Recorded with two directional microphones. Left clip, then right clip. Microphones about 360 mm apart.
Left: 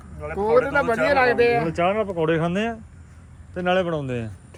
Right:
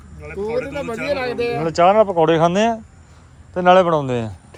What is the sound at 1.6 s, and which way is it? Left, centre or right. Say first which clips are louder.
Speech: right 9 dB; centre.